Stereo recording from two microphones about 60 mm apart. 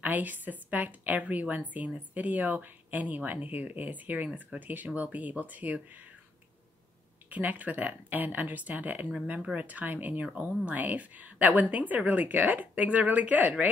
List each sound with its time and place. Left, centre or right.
0.0 s a woman's voice: right
7.2 s a woman's voice: right